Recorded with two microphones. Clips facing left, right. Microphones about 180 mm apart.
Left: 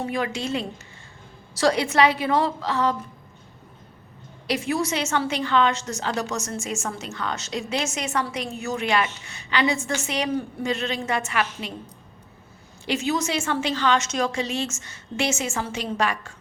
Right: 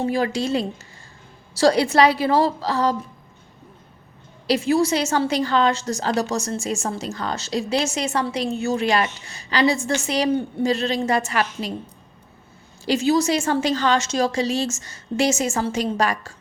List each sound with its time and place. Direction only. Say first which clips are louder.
0.0 s a woman's voice: right 5 dB; 35° right (ahead or behind)
4.4 s a woman's voice: right 6 dB; 30° right (ahead or behind)
12.8 s a woman's voice: right 6 dB; 35° right (ahead or behind)